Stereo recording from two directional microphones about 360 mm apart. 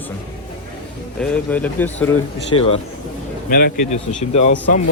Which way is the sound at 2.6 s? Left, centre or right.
Centre.